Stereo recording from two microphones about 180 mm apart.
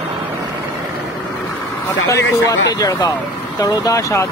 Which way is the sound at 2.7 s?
20° left (ahead or behind).